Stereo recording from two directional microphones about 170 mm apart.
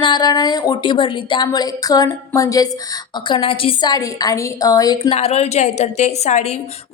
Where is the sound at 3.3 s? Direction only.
30° left (ahead or behind).